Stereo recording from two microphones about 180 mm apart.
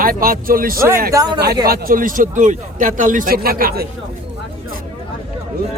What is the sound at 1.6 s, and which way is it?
A man's voice, 55° right (ahead or behind).